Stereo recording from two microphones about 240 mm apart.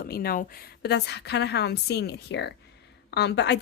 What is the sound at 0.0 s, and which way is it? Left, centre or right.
Speech, left.